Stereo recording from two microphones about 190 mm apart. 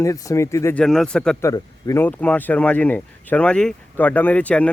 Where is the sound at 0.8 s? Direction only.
5° left (ahead or behind).